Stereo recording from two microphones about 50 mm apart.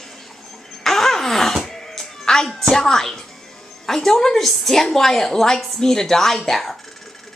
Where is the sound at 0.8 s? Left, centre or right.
Centre.